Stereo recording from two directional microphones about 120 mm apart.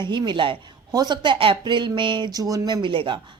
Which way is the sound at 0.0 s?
40° right (ahead or behind).